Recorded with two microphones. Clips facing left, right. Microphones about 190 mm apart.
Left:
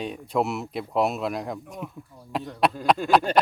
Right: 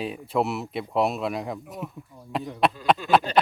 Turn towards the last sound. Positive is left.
turn(degrees=50)  # may be behind; listen again after turning